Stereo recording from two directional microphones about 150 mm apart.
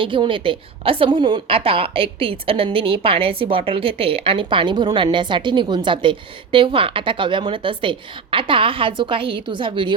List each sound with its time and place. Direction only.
0.0 s a woman's voice: 35° right (ahead or behind)